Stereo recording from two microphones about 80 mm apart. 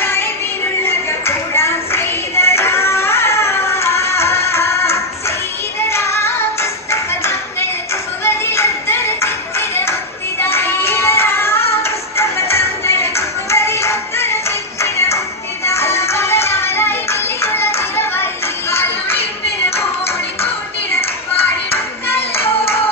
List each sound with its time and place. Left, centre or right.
0.0 s music: left